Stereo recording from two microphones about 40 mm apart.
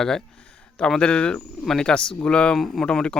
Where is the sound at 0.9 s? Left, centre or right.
Left.